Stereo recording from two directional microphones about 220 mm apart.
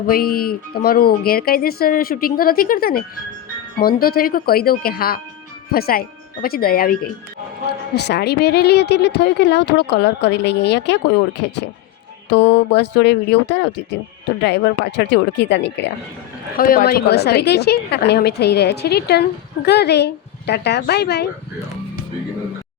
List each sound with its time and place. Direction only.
0.1 s a woman's voice: 45° left (ahead or behind)
16.6 s a woman's voice: 40° left (ahead or behind)